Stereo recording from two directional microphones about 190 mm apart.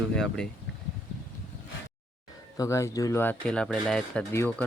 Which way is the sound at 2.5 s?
15° left (ahead or behind).